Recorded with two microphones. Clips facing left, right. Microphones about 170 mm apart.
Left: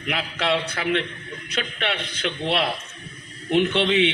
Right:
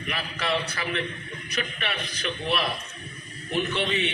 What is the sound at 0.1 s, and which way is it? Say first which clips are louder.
A man's voice: left 5 dB; 70° left (ahead or behind).